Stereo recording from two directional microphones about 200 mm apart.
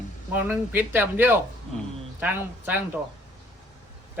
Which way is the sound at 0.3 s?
10° right (ahead or behind).